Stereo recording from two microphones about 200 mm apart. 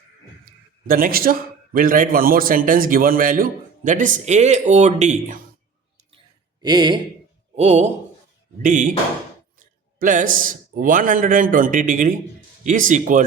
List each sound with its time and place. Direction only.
0.4 s a man's voice: 45° right (ahead or behind)
6.6 s speech: 20° right (ahead or behind)
7.5 s a man's voice: 35° right (ahead or behind)
10.0 s a man's voice: 40° right (ahead or behind)